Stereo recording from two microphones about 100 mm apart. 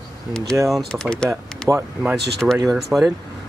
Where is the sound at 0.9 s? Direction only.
10° left (ahead or behind).